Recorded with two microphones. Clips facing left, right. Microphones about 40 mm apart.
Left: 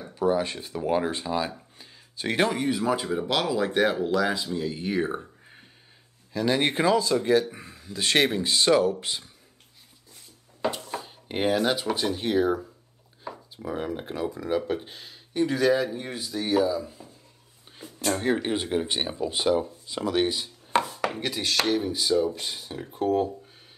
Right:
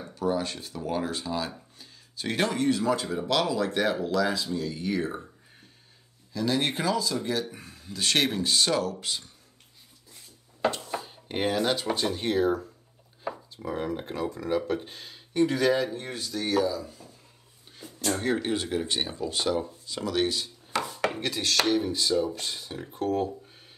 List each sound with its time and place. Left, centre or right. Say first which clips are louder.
0.1 s speech: left 4 dB; centre
6.3 s speech: left 3 dB; left
10.7 s speech: even; centre; by 17.1 s left
17.7 s speech: left 2 dB; centre
20.8 s chopping: even; centre
21.1 s speech: even; centre